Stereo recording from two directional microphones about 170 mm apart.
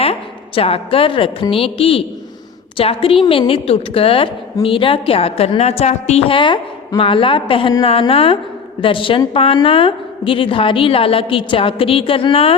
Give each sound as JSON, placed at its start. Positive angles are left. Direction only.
{"t": 0.0, "sound": "a woman's voice", "side_deg": 35}